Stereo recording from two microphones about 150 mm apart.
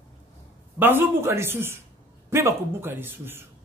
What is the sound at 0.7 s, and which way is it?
Speech, 15° right (ahead or behind).